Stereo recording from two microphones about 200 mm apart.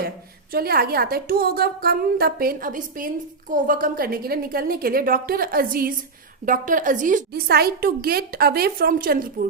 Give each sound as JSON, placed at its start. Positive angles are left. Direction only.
{"t": 0.5, "sound": "a woman's voice", "side_deg": -50}